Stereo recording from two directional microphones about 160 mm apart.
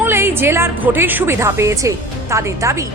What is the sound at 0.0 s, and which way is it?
A woman's voice, 15° right (ahead or behind).